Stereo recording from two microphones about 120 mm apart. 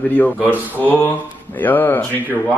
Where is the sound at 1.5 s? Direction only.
15° left (ahead or behind).